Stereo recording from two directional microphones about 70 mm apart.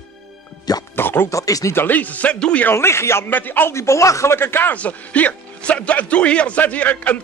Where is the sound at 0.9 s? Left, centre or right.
Left.